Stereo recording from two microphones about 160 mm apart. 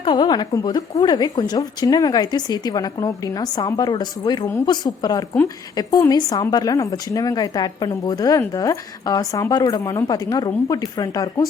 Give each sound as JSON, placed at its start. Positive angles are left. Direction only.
{"t": 0.0, "sound": "a woman's voice", "side_deg": 25}